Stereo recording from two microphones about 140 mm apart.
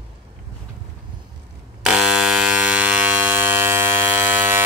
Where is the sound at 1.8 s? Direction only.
5° right (ahead or behind).